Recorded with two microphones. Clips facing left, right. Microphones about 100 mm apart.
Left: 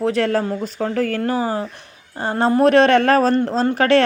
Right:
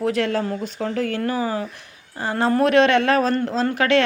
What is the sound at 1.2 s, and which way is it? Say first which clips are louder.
A woman's voice: left 2 dB; 30° left (ahead or behind).